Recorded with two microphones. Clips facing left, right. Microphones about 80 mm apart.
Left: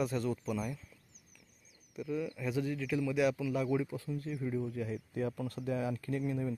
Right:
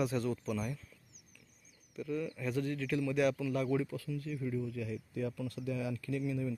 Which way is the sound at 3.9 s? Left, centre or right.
Left.